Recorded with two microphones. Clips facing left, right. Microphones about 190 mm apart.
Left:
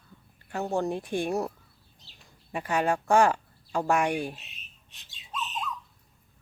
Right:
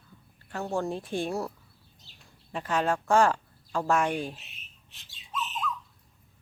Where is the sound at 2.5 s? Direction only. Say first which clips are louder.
Left 1 dB; 10° left (ahead or behind).